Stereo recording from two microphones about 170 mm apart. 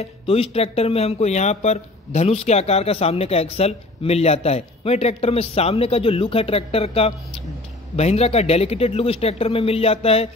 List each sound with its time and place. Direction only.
0.0 s speech: 35° left (ahead or behind)